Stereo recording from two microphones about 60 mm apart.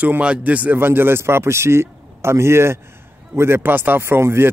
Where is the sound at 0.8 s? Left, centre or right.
Right.